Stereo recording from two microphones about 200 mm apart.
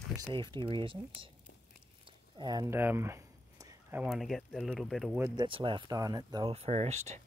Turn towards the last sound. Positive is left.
turn(degrees=-35)  # may be behind; listen again after turning